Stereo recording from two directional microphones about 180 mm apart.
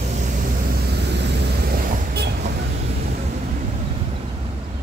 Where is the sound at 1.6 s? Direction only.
55° right (ahead or behind).